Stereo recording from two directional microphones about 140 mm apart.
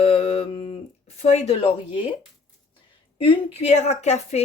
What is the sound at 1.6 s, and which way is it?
Speech, 45° left (ahead or behind).